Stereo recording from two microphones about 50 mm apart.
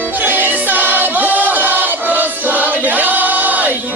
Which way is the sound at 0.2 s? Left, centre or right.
Right.